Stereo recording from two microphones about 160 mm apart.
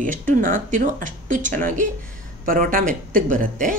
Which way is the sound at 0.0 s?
55° right (ahead or behind).